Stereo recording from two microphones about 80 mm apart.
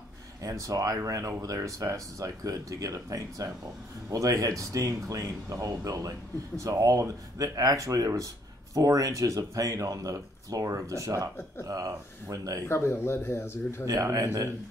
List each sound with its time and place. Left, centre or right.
0.4 s speech: right
12.6 s speech: left
13.8 s speech: right